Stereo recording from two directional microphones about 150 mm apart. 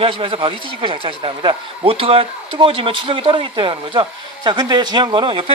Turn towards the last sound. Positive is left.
turn(degrees=-35)  # may be behind; listen again after turning